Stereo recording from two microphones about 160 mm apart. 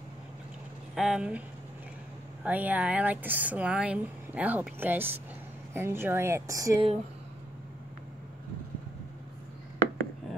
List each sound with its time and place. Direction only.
0.9 s speech: centre (ahead or behind)
2.4 s speech: 10° right (ahead or behind)